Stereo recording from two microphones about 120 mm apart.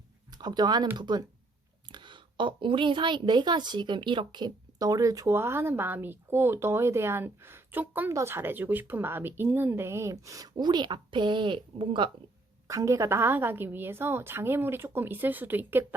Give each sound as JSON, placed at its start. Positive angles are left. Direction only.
{"t": 0.3, "sound": "a woman's voice", "side_deg": -35}
{"t": 12.6, "sound": "a woman's voice", "side_deg": -25}